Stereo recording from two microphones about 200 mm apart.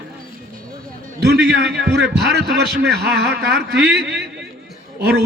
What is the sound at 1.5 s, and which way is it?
A man's voice, 55° right (ahead or behind).